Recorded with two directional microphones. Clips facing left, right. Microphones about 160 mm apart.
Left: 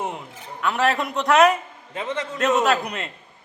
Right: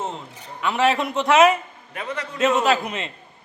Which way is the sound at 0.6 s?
Centre (ahead or behind).